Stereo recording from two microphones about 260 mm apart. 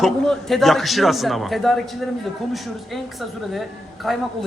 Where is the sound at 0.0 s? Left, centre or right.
Centre.